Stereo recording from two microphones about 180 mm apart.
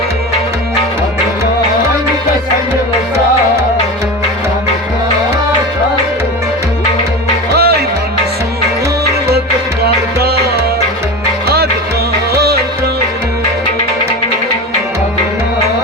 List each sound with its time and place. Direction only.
7.5 s music: 60° right (ahead or behind)
9.8 s music: 60° right (ahead or behind)